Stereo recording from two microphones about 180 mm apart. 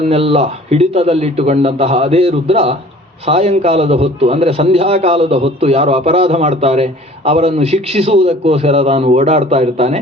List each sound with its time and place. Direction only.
0.0 s a man's voice: 35° right (ahead or behind)